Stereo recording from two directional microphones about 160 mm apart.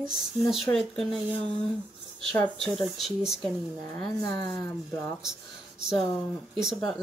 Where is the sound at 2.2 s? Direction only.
5° left (ahead or behind).